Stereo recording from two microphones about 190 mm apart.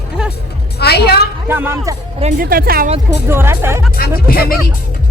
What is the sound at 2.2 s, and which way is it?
Speech, 40° right (ahead or behind).